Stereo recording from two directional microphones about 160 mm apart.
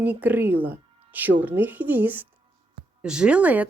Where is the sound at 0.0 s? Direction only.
10° right (ahead or behind).